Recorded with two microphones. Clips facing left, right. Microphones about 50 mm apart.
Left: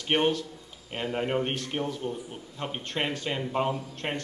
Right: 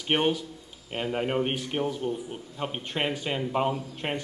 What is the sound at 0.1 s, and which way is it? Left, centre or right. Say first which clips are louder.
Speech: even; centre.